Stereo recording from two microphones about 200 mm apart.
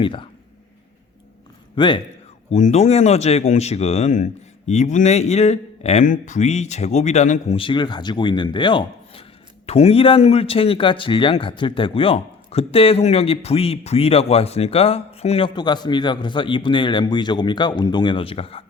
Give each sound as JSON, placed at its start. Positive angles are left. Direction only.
{"t": 0.0, "sound": "a man's voice", "side_deg": 25}
{"t": 1.7, "sound": "speech", "side_deg": 25}
{"t": 2.5, "sound": "a man's voice", "side_deg": 35}